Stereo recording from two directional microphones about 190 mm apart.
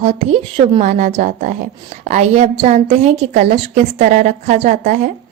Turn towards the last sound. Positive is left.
turn(degrees=-40)  # may be behind; listen again after turning